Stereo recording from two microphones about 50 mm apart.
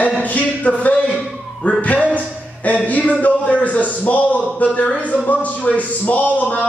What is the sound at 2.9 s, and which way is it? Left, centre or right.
A man's voice, left.